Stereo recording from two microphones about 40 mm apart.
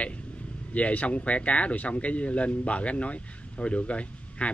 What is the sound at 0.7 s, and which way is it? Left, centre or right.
Speech, left.